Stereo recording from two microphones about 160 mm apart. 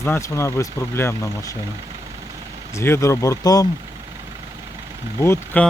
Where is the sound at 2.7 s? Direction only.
15° left (ahead or behind).